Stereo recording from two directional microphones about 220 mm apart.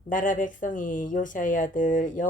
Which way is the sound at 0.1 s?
35° left (ahead or behind).